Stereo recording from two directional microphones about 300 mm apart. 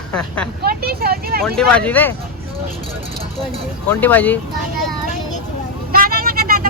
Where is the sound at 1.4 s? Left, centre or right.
Centre.